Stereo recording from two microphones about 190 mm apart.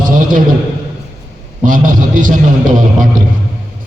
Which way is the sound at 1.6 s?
45° right (ahead or behind).